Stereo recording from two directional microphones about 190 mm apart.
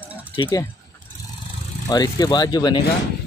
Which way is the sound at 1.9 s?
20° left (ahead or behind).